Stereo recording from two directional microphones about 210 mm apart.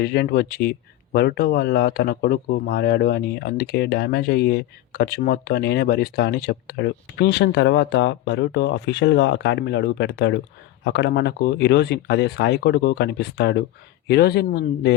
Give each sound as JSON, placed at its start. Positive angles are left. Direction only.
{"t": 0.0, "sound": "speech", "side_deg": 50}